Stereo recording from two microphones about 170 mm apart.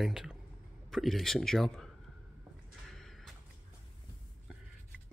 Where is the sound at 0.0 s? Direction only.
5° right (ahead or behind).